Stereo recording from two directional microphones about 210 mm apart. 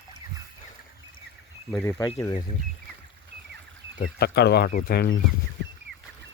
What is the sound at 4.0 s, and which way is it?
Speech, 50° left (ahead or behind).